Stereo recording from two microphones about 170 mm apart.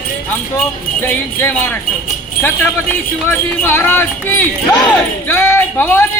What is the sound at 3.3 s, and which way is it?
Speech, 10° left (ahead or behind).